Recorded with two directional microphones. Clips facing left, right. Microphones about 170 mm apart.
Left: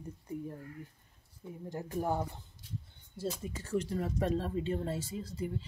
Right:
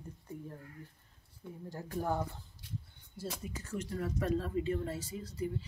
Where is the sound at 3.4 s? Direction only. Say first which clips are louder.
Left 5 dB; 30° left (ahead or behind).